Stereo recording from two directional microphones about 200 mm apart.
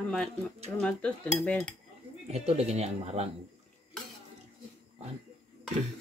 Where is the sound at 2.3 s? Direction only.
30° right (ahead or behind).